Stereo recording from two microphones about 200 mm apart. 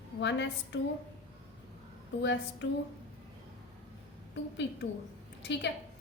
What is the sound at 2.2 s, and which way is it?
Speech, 65° left (ahead or behind).